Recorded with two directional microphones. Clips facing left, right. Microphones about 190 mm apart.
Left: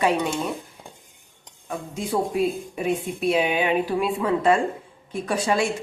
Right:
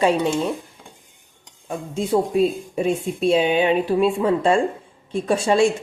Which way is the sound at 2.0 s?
25° right (ahead or behind).